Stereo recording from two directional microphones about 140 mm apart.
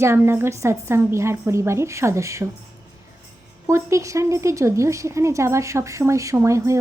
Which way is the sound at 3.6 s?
20° right (ahead or behind).